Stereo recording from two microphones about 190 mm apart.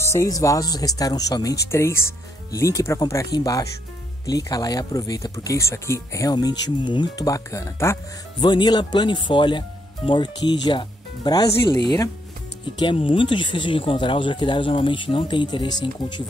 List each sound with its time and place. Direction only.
0.0 s speech: 15° left (ahead or behind)